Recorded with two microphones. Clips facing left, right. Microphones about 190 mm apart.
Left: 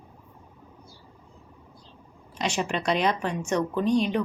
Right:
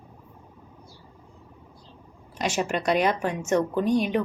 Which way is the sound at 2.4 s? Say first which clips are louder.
Right 2 dB; 5° right (ahead or behind).